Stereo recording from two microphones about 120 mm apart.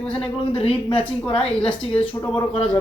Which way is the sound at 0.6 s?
50° left (ahead or behind).